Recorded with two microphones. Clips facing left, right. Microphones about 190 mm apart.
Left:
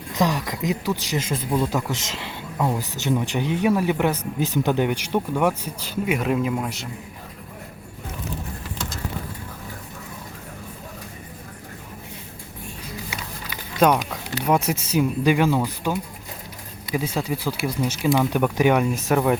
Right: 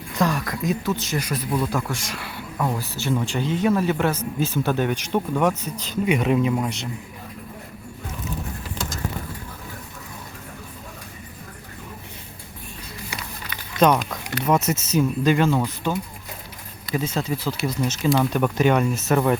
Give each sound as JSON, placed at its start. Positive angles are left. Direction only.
{"t": 0.1, "sound": "speech", "side_deg": 20}
{"t": 13.1, "sound": "speech", "side_deg": 10}